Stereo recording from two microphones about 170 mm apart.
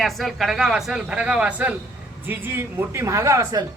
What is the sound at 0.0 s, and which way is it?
A woman's voice, centre (ahead or behind).